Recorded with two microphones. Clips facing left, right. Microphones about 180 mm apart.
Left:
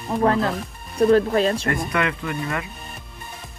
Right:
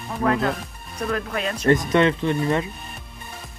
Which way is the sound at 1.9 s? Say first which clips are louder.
Right 6 dB; 30° right (ahead or behind).